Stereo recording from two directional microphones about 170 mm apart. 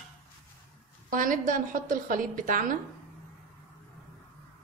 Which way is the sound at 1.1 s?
50° right (ahead or behind).